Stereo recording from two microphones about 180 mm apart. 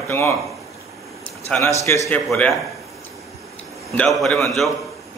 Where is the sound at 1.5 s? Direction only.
15° left (ahead or behind).